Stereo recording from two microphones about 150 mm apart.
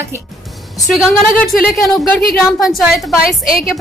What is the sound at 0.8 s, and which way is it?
A woman's voice, 5° right (ahead or behind).